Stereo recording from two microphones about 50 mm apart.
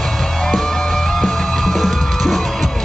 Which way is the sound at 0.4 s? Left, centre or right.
Centre.